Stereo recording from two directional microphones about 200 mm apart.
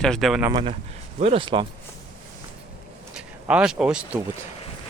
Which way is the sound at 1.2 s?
25° right (ahead or behind).